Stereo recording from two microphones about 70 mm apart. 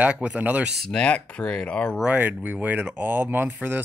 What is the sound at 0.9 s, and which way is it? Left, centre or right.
Speech, centre.